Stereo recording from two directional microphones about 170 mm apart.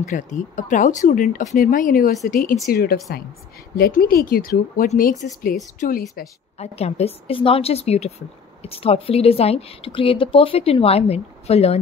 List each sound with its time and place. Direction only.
0.0 s speech: 45° left (ahead or behind)
2.7 s speech: 60° left (ahead or behind)
6.6 s speech: 35° left (ahead or behind)